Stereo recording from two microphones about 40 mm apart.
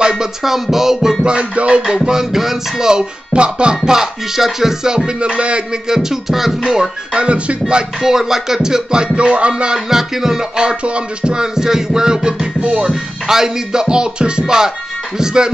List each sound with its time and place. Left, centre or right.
0.1 s music: centre
1.2 s music: right
2.0 s music: centre; by 5.6 s right
5.9 s music: centre
7.2 s music: right
8.0 s music: centre
11.5 s music: centre
13.3 s music: centre